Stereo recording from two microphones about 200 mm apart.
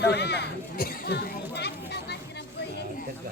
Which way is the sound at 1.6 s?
55° left (ahead or behind).